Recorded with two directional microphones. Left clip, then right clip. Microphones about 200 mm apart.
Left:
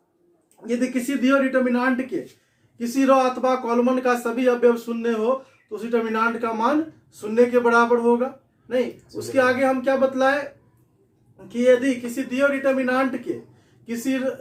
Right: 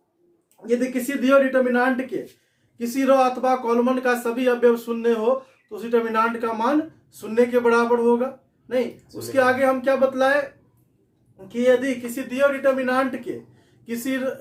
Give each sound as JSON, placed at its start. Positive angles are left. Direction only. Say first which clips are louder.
{"t": 0.6, "sound": "a man's voice", "louder": "right 2 dB", "side_deg": -10}
{"t": 11.4, "sound": "speech", "louder": "left 1 dB", "side_deg": -20}